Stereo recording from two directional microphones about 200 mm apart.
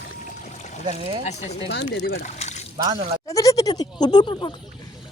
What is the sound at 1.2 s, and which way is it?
Speech, 35° left (ahead or behind).